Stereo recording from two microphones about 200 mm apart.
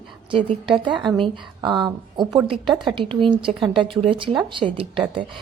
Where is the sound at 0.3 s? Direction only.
25° right (ahead or behind).